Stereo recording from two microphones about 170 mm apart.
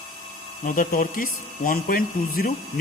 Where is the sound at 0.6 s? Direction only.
55° left (ahead or behind).